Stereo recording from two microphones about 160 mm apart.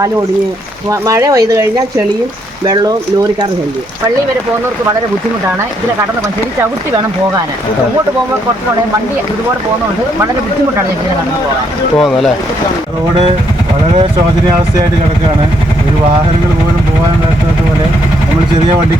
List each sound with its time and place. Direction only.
0.9 s speech: 20° right (ahead or behind)
2.6 s speech: 25° right (ahead or behind)
11.9 s speech: centre (ahead or behind)